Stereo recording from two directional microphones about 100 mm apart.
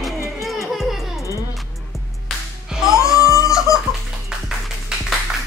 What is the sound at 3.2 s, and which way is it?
Baby cry, 35° left (ahead or behind).